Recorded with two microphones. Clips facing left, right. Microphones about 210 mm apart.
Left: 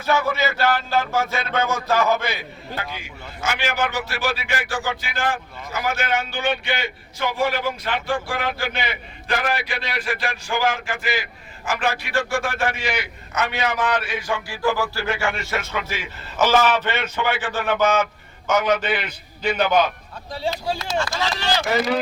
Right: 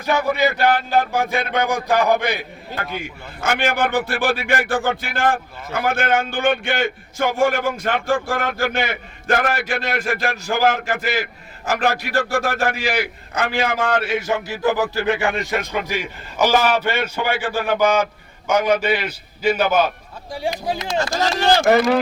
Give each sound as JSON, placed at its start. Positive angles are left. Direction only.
{"t": 0.0, "sound": "a man's voice", "side_deg": -15}
{"t": 2.7, "sound": "a man's voice", "side_deg": -55}
{"t": 14.0, "sound": "a man's voice", "side_deg": -25}
{"t": 21.0, "sound": "a man's voice", "side_deg": -45}